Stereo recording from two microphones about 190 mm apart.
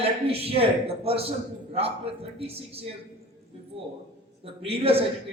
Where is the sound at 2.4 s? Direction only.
30° right (ahead or behind).